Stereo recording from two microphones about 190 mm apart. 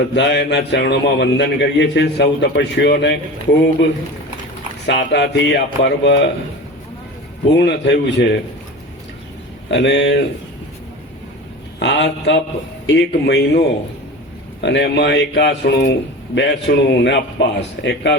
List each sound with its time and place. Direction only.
0.0 s a man's voice: 65° left (ahead or behind)
4.9 s a man's voice: 65° left (ahead or behind)
7.4 s a man's voice: 65° left (ahead or behind)
9.6 s a man's voice: 70° left (ahead or behind)
11.8 s a man's voice: 65° left (ahead or behind)
14.6 s a man's voice: 65° left (ahead or behind)